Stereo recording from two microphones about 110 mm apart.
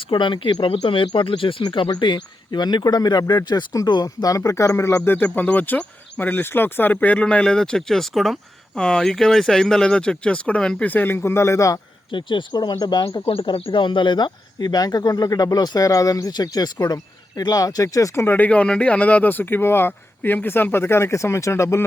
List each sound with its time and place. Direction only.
0.0 s speech: 50° left (ahead or behind); by 11.8 s 30° left (ahead or behind)
12.1 s speech: 45° left (ahead or behind)
13.2 s speech: 55° left (ahead or behind); by 21.8 s 25° left (ahead or behind)